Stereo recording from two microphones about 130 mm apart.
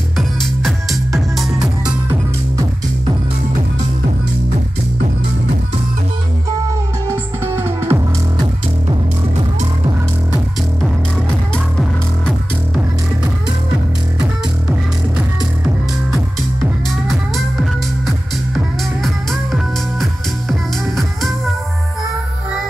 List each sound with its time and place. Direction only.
0.4 s music: centre (ahead or behind)
7.1 s music: 20° right (ahead or behind)
11.5 s music: 5° left (ahead or behind)
19.0 s music: centre (ahead or behind)